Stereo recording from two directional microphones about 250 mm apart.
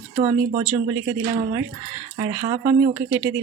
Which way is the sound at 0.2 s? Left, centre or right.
Right.